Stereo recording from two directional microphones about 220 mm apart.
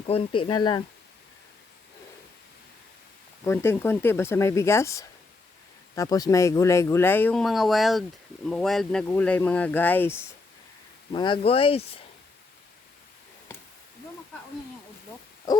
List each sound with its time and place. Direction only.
0.0 s speech: 25° left (ahead or behind)
3.4 s speech: 10° left (ahead or behind)
11.1 s speech: 20° left (ahead or behind)
15.5 s hoot: 15° left (ahead or behind)